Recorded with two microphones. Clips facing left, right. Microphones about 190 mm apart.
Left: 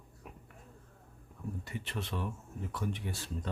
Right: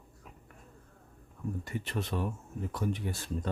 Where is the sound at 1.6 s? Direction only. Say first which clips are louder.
Right 4 dB; 45° right (ahead or behind).